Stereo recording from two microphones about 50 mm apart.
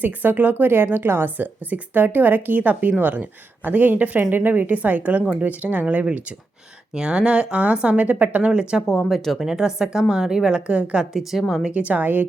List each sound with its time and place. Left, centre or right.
0.0 s speech: right
6.9 s speech: centre
8.4 s speech: centre
8.9 s speech: centre
9.5 s speech: centre
10.7 s speech: right
11.1 s speech: centre
11.7 s speech: right